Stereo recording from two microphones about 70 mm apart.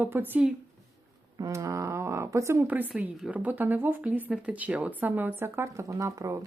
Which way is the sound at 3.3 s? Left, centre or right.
Right.